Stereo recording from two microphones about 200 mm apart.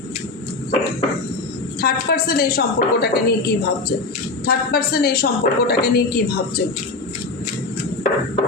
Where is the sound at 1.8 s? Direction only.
50° left (ahead or behind).